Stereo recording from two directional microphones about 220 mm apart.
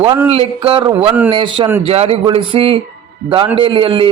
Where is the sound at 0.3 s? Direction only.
25° right (ahead or behind).